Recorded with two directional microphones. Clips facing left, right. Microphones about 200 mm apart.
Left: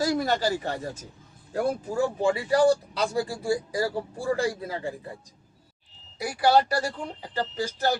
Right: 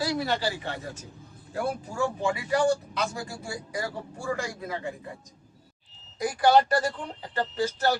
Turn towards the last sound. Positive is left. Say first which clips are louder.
# right 1 dB
turn(degrees=15)  # may be behind; listen again after turning